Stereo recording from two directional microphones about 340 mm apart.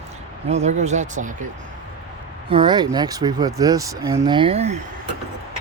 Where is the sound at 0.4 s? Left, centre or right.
Centre.